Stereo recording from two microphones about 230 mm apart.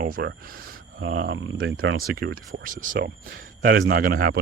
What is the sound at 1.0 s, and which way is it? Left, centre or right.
Speech, right.